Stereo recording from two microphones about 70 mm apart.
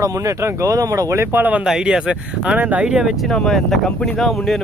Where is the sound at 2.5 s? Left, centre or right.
Right.